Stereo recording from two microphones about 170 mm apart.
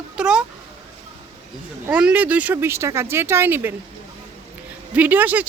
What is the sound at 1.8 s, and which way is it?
Speech, 10° right (ahead or behind).